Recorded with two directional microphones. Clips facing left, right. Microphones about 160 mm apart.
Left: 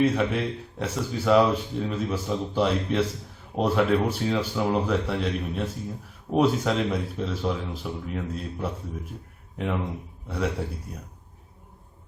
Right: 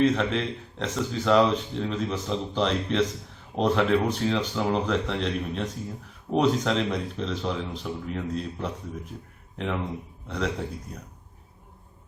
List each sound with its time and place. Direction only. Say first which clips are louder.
0.0 s speech: even; 10° left (ahead or behind)
10.2 s speech: left 1 dB; 10° left (ahead or behind)